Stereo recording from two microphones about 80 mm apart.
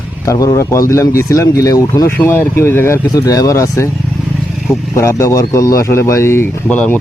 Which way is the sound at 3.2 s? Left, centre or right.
Left.